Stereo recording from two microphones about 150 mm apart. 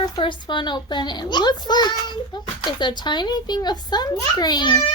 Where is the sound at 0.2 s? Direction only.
30° left (ahead or behind).